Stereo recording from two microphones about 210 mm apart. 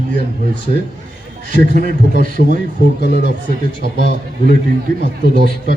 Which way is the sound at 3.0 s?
50° left (ahead or behind).